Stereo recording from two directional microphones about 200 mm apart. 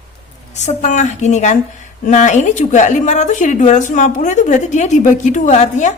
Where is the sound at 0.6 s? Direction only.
35° left (ahead or behind).